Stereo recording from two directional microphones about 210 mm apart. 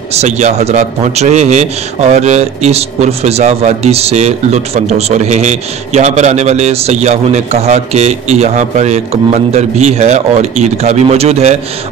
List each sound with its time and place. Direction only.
0.1 s a man's voice: 30° right (ahead or behind)